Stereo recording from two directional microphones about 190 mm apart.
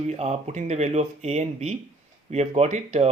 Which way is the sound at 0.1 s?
35° right (ahead or behind).